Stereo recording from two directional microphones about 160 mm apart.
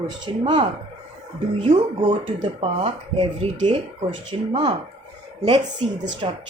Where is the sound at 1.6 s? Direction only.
35° right (ahead or behind).